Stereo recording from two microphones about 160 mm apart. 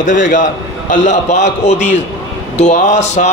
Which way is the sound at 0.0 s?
50° left (ahead or behind).